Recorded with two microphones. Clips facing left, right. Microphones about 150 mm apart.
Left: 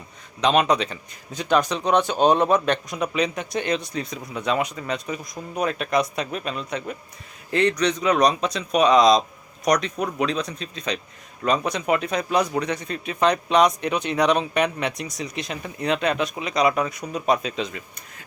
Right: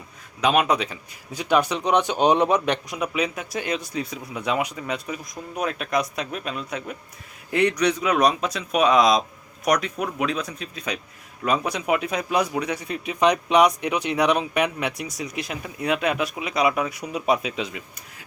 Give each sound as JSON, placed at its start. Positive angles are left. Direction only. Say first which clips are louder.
{"t": 0.4, "sound": "speech", "louder": "left 1 dB", "side_deg": -5}